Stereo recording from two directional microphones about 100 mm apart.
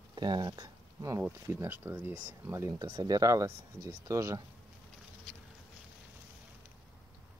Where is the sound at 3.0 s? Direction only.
40° right (ahead or behind).